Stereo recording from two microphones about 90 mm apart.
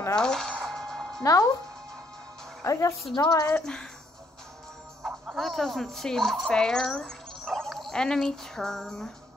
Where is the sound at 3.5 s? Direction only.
10° left (ahead or behind).